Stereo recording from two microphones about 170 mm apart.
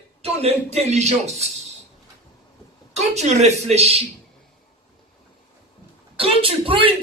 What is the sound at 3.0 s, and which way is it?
Speech, 40° right (ahead or behind).